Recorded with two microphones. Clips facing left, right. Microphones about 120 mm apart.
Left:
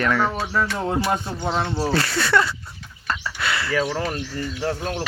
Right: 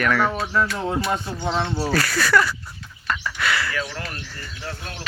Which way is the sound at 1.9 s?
25° left (ahead or behind).